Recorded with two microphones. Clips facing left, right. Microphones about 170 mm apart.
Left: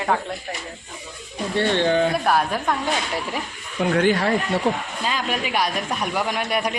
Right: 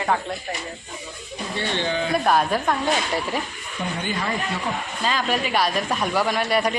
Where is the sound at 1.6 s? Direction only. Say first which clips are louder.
Left 7 dB; 60° left (ahead or behind).